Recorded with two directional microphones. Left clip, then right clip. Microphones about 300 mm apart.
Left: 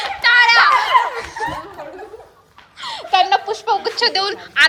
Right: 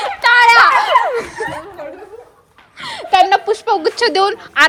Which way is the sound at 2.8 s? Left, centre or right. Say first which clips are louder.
Right 4 dB; right.